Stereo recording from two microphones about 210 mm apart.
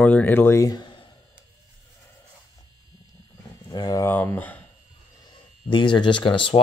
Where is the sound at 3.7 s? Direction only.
20° left (ahead or behind).